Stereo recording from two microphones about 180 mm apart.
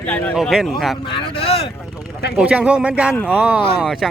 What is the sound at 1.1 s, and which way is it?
Speech, 30° left (ahead or behind).